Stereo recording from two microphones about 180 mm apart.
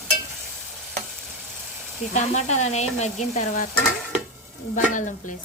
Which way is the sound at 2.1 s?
40° left (ahead or behind).